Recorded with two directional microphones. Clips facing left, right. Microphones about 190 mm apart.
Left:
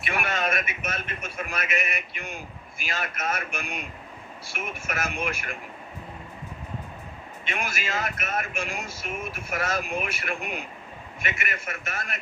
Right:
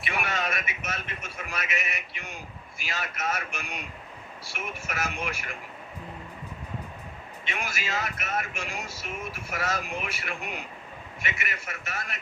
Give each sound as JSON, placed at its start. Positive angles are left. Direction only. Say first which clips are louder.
{"t": 0.0, "sound": "a man's voice", "louder": "left 3 dB", "side_deg": 55}
{"t": 7.4, "sound": "a man's voice", "louder": "left 3 dB", "side_deg": 50}